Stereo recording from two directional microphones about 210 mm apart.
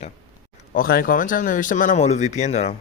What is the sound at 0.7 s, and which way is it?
Speech, 45° left (ahead or behind).